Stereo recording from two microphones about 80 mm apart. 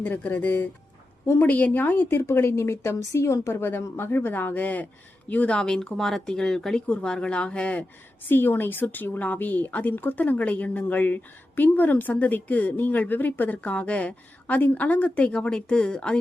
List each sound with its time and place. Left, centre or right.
0.0 s a woman's voice: left
8.3 s a woman's voice: left